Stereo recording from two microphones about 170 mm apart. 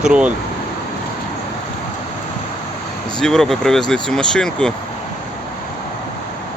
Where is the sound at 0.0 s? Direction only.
5° right (ahead or behind).